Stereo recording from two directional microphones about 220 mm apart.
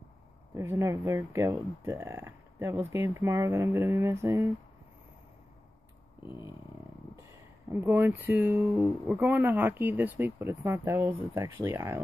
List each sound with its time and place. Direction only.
0.6 s speech: 10° right (ahead or behind)
7.7 s speech: 10° right (ahead or behind)